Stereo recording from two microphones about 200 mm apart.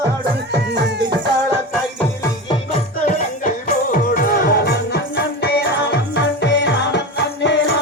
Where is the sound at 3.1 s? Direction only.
40° left (ahead or behind); by 7.5 s 60° left (ahead or behind).